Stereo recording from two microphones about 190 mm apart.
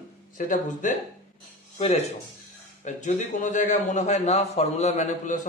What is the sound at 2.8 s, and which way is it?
A man's voice, 40° left (ahead or behind).